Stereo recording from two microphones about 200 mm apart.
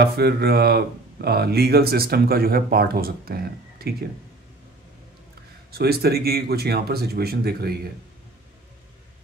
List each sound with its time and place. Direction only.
0.0 s speech: 50° right (ahead or behind)
5.7 s speech: 50° right (ahead or behind)